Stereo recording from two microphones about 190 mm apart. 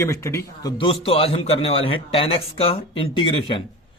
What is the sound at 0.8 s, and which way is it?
A man's voice, 30° left (ahead or behind).